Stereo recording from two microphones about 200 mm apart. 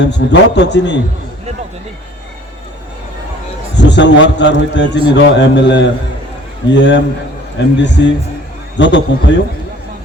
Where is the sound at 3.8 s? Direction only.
60° left (ahead or behind).